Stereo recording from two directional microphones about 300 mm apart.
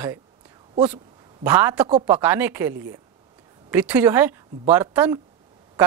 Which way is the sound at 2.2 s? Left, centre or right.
Centre.